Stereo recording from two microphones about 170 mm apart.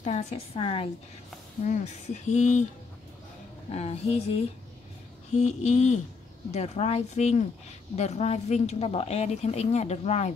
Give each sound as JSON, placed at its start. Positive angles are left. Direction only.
{"t": 0.0, "sound": "a woman's voice", "side_deg": 40}
{"t": 3.7, "sound": "a woman's voice", "side_deg": 40}
{"t": 5.4, "sound": "a woman's voice", "side_deg": 40}